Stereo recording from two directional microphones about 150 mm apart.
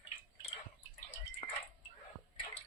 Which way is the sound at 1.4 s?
40° left (ahead or behind).